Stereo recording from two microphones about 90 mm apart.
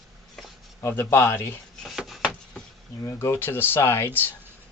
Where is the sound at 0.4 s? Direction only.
Centre (ahead or behind).